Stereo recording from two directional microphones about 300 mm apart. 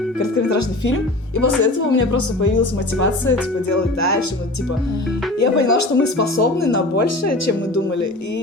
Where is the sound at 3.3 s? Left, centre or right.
Left.